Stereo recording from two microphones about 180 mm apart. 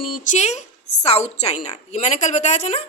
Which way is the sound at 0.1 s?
40° left (ahead or behind).